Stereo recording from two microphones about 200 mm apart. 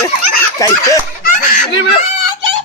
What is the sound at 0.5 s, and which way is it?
Snicker, 15° left (ahead or behind).